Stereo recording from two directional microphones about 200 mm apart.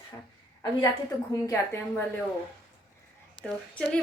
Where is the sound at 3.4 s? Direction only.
5° left (ahead or behind).